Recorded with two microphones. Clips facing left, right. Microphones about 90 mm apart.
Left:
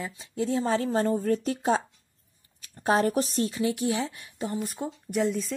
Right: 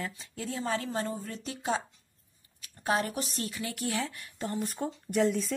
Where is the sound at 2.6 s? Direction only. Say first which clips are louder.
Left 6 dB; 35° left (ahead or behind).